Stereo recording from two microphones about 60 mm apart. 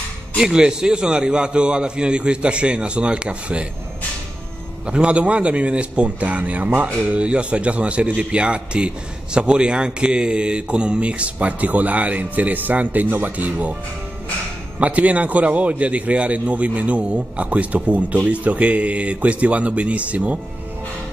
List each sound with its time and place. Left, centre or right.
0.4 s a man's voice: centre
4.8 s speech: centre
14.8 s speech: right